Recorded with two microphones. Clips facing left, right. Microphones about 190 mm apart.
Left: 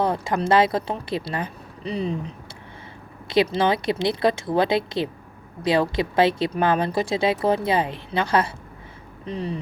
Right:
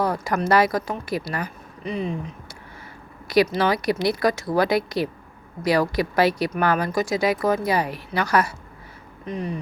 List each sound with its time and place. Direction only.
0.0 s speech: 25° left (ahead or behind)